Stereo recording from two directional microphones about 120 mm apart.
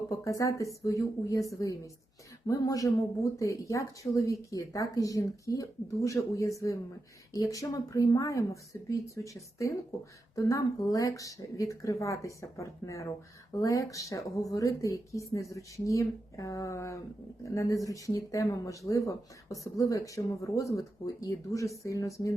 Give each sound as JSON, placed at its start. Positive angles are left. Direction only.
{"t": 0.3, "sound": "speech", "side_deg": 25}